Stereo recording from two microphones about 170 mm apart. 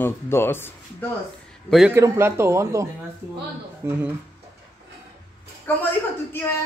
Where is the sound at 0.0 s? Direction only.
15° left (ahead or behind).